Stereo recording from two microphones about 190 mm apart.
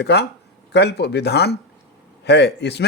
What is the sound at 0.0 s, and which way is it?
A man's voice, 60° left (ahead or behind).